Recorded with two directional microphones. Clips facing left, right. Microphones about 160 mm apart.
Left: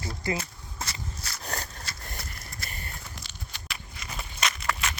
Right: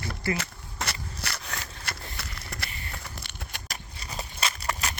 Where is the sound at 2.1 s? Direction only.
75° right (ahead or behind).